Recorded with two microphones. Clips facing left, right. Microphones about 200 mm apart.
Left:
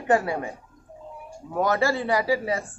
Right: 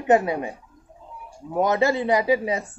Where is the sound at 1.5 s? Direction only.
20° right (ahead or behind).